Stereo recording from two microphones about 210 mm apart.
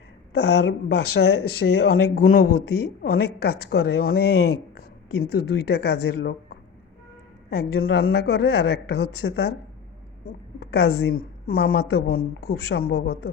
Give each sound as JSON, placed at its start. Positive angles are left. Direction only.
{"t": 0.3, "sound": "speech", "side_deg": 50}
{"t": 1.6, "sound": "speech", "side_deg": 90}
{"t": 2.1, "sound": "speech", "side_deg": 45}
{"t": 8.1, "sound": "a woman's voice", "side_deg": 50}